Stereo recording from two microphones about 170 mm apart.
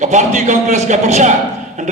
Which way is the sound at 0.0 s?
45° right (ahead or behind).